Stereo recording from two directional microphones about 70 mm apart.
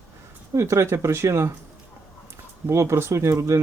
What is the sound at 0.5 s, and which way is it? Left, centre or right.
Speech, right.